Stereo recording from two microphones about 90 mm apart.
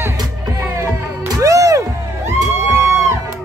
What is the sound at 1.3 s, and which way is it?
Music, 40° right (ahead or behind).